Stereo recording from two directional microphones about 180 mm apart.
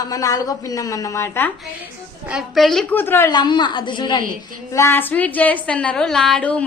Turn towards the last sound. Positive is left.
turn(degrees=5)  # may be behind; listen again after turning